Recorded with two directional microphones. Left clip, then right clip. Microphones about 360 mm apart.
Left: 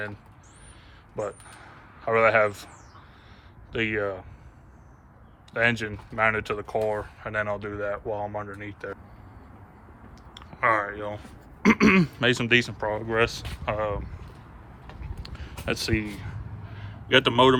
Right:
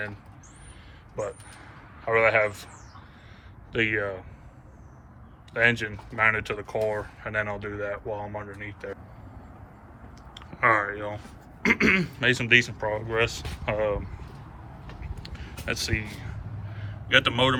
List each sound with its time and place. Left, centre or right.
1.1 s speech: centre
3.7 s speech: centre
5.5 s speech: centre
10.3 s a sound: centre
11.6 s speech: centre
15.0 s a sound: centre